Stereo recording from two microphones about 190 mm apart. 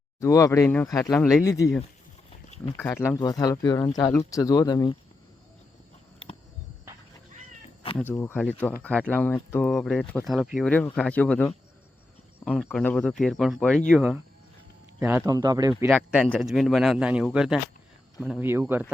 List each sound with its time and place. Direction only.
0.2 s speech: 15° left (ahead or behind)
7.9 s a man's voice: 10° left (ahead or behind)
12.6 s a man's voice: 10° left (ahead or behind); by 15.7 s 20° right (ahead or behind)
16.1 s a man's voice: centre (ahead or behind)
18.4 s speech: 10° right (ahead or behind)